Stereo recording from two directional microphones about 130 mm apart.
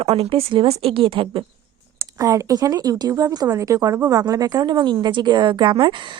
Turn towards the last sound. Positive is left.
turn(degrees=-35)  # may be behind; listen again after turning